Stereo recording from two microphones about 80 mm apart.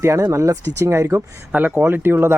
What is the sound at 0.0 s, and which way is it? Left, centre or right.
Speech, right.